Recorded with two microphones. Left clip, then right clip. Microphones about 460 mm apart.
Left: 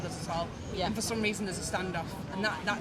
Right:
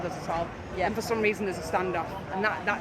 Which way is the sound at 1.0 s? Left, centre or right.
Left.